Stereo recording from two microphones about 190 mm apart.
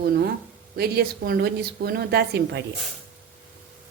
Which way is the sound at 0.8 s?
55° right (ahead or behind).